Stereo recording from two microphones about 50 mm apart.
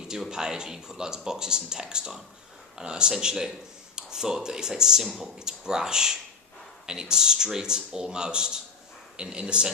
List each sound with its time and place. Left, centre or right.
0.1 s speech: centre